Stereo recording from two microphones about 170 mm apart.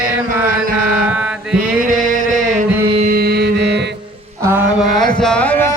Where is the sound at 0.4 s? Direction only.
55° right (ahead or behind).